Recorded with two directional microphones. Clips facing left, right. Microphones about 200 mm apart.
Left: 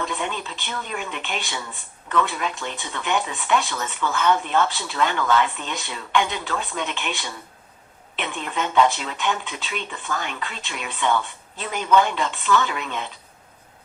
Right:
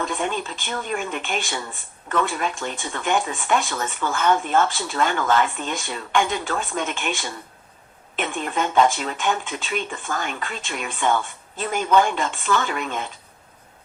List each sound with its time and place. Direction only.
0.0 s speech: 45° right (ahead or behind)